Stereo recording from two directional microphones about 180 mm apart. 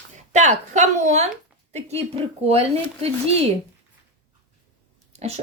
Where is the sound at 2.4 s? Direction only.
35° right (ahead or behind).